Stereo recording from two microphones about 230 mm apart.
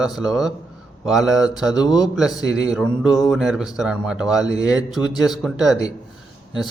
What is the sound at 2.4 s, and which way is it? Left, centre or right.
Speech, centre.